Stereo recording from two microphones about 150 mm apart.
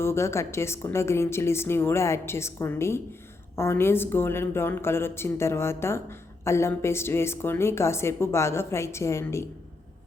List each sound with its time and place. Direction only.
0.0 s a woman's voice: 15° left (ahead or behind)